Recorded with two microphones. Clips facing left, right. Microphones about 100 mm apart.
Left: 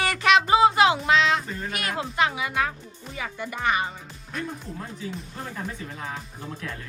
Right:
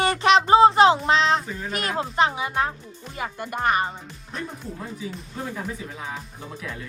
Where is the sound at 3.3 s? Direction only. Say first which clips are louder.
Right 3 dB; 55° right (ahead or behind).